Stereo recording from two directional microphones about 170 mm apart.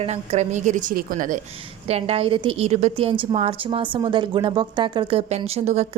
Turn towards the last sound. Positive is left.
turn(degrees=-40)  # may be behind; listen again after turning